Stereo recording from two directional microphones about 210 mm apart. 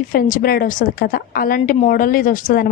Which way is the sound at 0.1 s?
45° left (ahead or behind).